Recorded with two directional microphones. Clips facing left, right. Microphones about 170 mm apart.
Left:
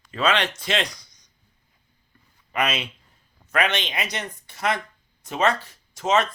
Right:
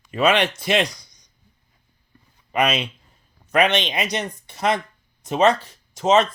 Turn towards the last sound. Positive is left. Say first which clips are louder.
# right 5 dB
turn(degrees=-20)  # may be behind; listen again after turning